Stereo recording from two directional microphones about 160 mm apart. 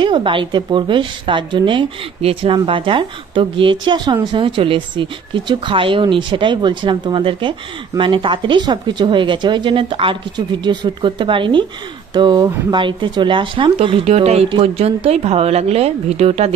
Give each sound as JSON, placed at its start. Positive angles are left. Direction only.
{"t": 0.0, "sound": "a woman's voice", "side_deg": -30}